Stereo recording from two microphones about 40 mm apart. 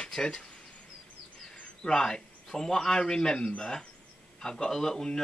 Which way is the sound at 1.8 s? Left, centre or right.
Centre.